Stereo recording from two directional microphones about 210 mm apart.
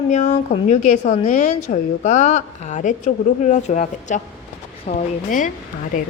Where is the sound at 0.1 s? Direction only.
30° left (ahead or behind).